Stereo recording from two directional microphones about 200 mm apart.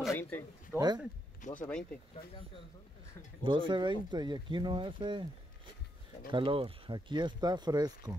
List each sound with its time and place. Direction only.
0.1 s speech: 10° left (ahead or behind)
0.7 s speech: 20° right (ahead or behind)
1.5 s speech: 5° left (ahead or behind)
3.4 s speech: 25° right (ahead or behind)
6.3 s speech: 25° right (ahead or behind)